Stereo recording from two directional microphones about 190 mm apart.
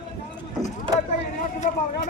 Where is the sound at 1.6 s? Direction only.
40° left (ahead or behind).